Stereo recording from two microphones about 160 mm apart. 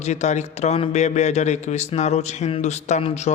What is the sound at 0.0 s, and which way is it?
A man's voice, 45° left (ahead or behind).